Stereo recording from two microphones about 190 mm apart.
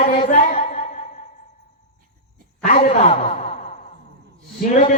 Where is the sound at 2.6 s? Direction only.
30° left (ahead or behind).